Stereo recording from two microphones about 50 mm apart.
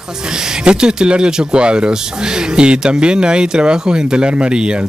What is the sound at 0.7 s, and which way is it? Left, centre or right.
Speech, centre.